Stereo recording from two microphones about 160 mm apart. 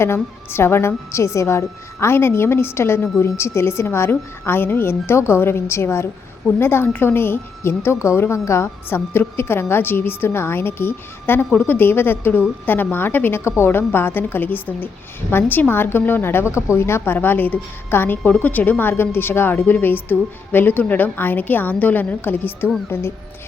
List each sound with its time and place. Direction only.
0.0 s a woman's voice: 15° left (ahead or behind)